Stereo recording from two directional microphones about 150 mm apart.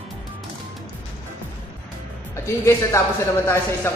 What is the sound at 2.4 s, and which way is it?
Speech, 20° left (ahead or behind).